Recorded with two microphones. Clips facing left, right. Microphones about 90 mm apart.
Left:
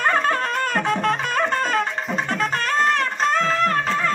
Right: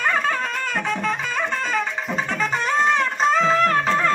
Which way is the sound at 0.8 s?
45° left (ahead or behind).